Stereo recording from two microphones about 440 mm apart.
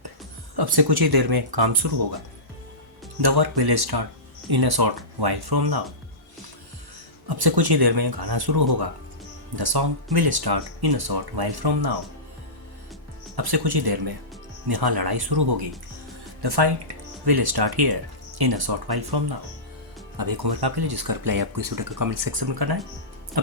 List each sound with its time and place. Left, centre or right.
0.5 s speech: right
3.2 s speech: right
7.3 s speech: right
13.3 s speech: right